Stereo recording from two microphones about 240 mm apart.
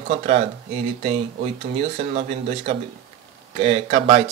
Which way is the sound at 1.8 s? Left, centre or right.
Right.